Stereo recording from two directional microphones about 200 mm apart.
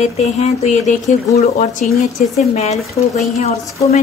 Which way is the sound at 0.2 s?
35° left (ahead or behind).